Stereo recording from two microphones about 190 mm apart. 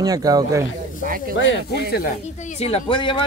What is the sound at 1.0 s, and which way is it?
Speech, 50° right (ahead or behind).